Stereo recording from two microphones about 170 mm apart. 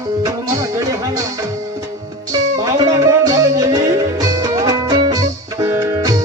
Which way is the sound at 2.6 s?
20° right (ahead or behind).